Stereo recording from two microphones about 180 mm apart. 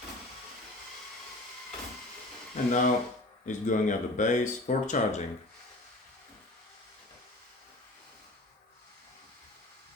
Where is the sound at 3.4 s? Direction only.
45° left (ahead or behind).